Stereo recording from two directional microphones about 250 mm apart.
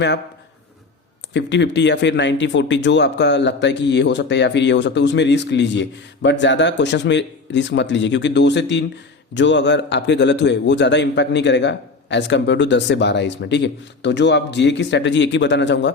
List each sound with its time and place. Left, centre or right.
1.3 s a man's voice: left